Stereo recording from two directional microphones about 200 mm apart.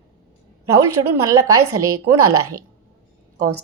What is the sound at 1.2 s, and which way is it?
Speech, 15° right (ahead or behind).